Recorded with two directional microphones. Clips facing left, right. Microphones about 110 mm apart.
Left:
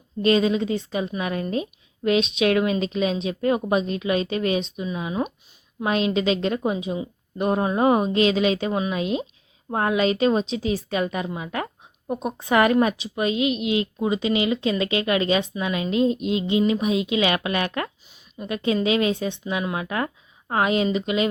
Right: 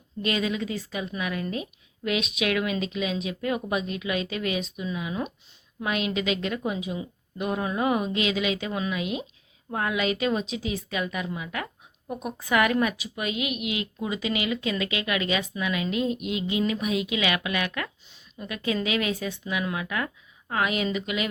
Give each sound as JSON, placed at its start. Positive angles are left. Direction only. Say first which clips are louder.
{"t": 0.2, "sound": "speech", "louder": "left 8 dB", "side_deg": 30}
{"t": 7.3, "sound": "speech", "louder": "left 6 dB", "side_deg": 35}